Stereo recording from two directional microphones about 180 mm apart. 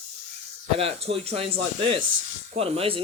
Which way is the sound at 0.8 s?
30° right (ahead or behind).